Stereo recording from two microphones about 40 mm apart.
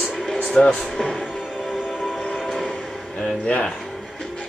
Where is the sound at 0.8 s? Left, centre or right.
Centre.